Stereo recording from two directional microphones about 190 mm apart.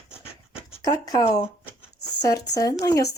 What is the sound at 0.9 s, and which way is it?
Speech, 25° left (ahead or behind).